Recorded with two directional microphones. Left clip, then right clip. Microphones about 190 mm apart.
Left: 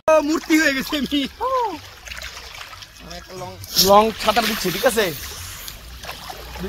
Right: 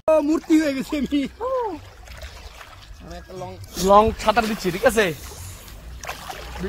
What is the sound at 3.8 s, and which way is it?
Speech, 45° left (ahead or behind).